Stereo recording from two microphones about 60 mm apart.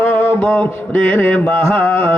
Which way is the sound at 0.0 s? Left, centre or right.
Left.